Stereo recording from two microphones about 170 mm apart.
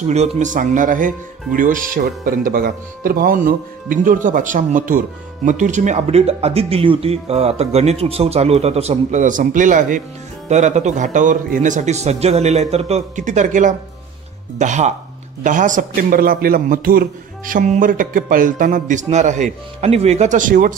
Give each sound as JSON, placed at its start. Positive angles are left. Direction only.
{"t": 0.0, "sound": "speech", "side_deg": -40}